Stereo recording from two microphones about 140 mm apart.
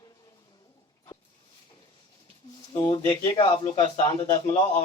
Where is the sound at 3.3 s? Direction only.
35° left (ahead or behind).